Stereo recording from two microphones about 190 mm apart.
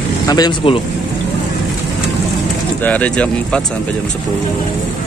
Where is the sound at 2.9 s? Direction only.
5° left (ahead or behind).